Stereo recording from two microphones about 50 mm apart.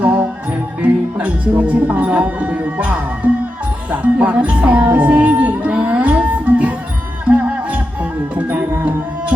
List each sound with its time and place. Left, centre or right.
0.0 s music: right
0.8 s speech: right
4.9 s a sound: right
7.3 s music: right